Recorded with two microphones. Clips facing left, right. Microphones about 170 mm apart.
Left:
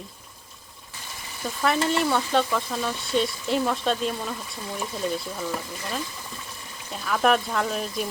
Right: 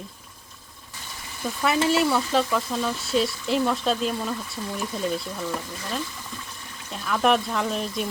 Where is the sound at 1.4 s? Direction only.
5° right (ahead or behind).